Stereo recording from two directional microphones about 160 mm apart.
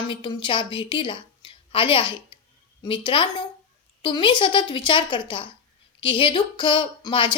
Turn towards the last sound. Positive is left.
turn(degrees=30)  # may be behind; listen again after turning